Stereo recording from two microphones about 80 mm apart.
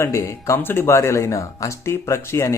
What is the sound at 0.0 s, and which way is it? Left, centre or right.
Speech, left.